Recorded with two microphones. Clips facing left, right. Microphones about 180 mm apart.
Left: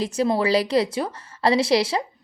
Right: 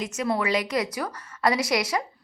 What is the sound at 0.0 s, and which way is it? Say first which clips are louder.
A woman's voice: left 5 dB; 30° left (ahead or behind).